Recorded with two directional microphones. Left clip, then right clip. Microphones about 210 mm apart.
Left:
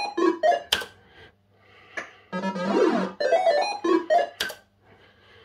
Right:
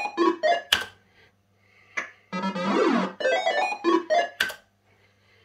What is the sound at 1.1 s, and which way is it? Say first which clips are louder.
Wheeze: left 7 dB; 50° left (ahead or behind).